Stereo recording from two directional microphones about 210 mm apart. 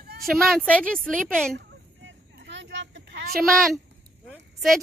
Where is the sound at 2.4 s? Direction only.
60° right (ahead or behind).